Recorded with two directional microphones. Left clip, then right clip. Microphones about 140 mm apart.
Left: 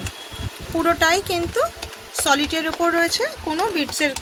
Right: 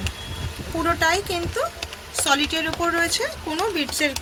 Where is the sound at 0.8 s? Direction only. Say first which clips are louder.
Left 3 dB; 90° left.